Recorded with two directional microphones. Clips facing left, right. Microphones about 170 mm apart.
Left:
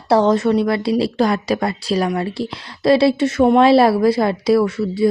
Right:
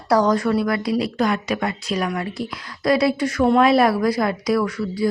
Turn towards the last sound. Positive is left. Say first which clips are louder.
# left 5 dB
turn(degrees=25)  # may be behind; listen again after turning